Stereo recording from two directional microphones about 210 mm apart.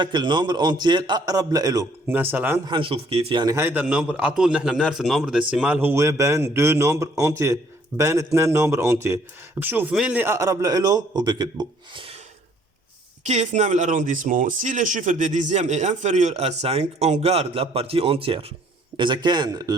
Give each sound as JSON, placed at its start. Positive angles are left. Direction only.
{"t": 0.0, "sound": "a man's voice", "side_deg": -20}
{"t": 2.6, "sound": "a man's voice", "side_deg": -25}
{"t": 13.2, "sound": "a man's voice", "side_deg": -35}